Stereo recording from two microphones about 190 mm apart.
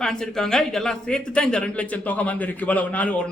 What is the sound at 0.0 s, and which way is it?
Speech, 5° left (ahead or behind).